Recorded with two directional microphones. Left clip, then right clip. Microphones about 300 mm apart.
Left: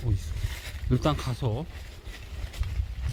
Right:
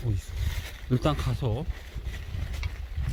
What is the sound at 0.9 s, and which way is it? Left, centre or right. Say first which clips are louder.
Speech: even; centre.